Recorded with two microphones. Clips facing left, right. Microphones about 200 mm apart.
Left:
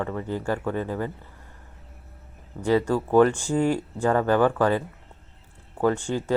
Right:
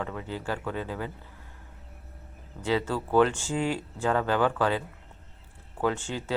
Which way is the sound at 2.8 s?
15° left (ahead or behind).